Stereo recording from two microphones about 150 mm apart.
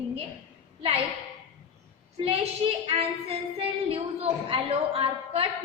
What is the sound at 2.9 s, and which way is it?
Speech, 40° right (ahead or behind).